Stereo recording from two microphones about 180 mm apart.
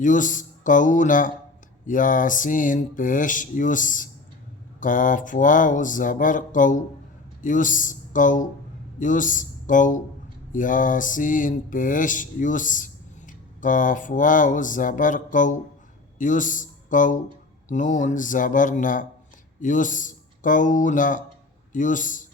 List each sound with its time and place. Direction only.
0.0 s mantra: 45° left (ahead or behind)
9.0 s speech: 45° left (ahead or behind)
10.5 s mantra: 45° left (ahead or behind)
16.1 s speech: 45° left (ahead or behind)
17.7 s mantra: 45° left (ahead or behind)
21.7 s a man's voice: 45° left (ahead or behind)